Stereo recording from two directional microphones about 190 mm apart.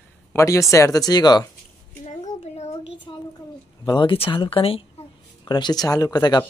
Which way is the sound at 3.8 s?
25° left (ahead or behind).